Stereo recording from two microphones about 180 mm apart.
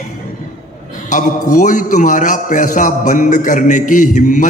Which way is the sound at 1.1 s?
45° left (ahead or behind).